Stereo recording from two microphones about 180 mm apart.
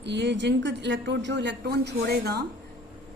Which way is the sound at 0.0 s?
75° right (ahead or behind).